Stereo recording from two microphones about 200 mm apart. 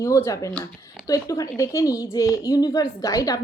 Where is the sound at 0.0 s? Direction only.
15° left (ahead or behind).